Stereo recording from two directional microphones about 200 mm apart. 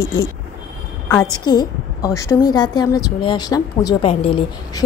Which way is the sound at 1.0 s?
10° left (ahead or behind).